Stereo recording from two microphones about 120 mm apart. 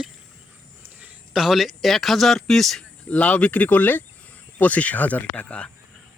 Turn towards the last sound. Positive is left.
turn(degrees=10)  # may be behind; listen again after turning